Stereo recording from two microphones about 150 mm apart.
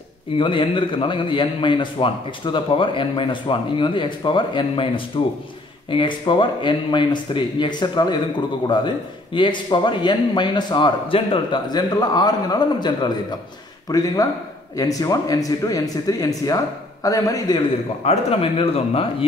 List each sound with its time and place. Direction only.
0.4 s a man's voice: 35° left (ahead or behind)
18.0 s a man's voice: 40° left (ahead or behind)